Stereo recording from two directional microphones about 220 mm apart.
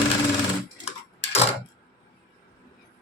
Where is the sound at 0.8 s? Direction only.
30° left (ahead or behind).